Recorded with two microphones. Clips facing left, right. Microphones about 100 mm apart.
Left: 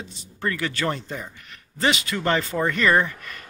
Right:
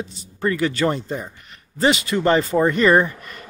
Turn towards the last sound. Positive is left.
turn(degrees=-30)  # may be behind; listen again after turning